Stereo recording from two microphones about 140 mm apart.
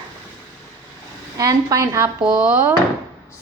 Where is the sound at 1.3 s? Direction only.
25° right (ahead or behind).